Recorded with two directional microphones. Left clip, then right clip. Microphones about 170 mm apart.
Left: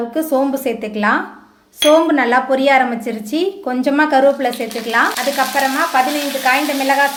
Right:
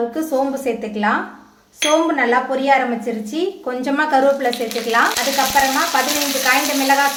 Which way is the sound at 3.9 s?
35° left (ahead or behind).